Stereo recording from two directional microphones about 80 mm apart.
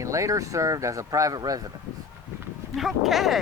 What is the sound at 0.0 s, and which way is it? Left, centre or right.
Speech, right.